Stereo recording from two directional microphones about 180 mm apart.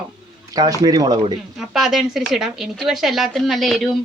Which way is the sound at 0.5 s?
20° right (ahead or behind).